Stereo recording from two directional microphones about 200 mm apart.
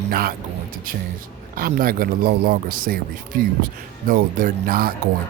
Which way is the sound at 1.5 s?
45° right (ahead or behind).